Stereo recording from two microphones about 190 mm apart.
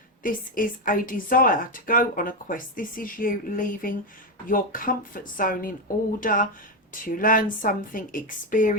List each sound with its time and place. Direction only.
0.2 s speech: 45° left (ahead or behind)